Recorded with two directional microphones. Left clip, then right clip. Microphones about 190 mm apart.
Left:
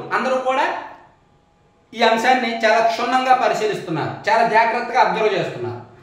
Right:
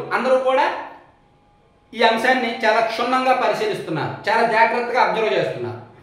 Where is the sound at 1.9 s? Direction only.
15° left (ahead or behind).